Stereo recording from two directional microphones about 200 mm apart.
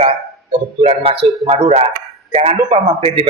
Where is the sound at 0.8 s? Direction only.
30° right (ahead or behind).